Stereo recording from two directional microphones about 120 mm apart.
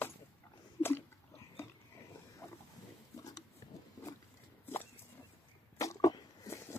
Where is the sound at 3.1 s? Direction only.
30° left (ahead or behind).